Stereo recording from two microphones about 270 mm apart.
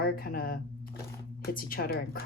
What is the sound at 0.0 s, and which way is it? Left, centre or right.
A woman's voice, left.